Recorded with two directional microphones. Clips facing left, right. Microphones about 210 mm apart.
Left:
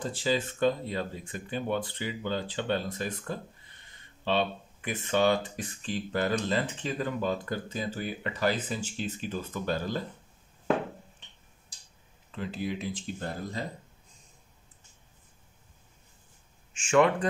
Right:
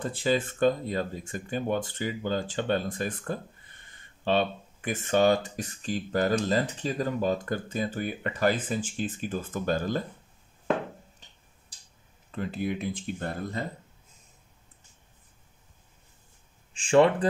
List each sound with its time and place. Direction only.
0.0 s speech: 55° right (ahead or behind)
11.2 s tick-tock: 40° right (ahead or behind)
12.3 s speech: 50° right (ahead or behind)
16.7 s speech: 35° right (ahead or behind)